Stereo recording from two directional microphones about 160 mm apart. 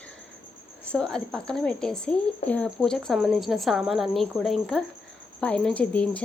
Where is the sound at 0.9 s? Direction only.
5° left (ahead or behind).